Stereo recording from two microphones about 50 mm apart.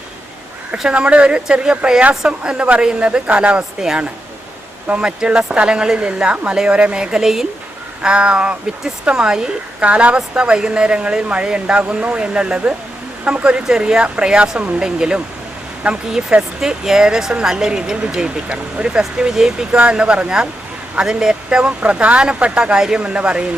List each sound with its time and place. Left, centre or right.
0.9 s speech: right
5.0 s speech: centre
16.6 s speech: centre
21.8 s speech: right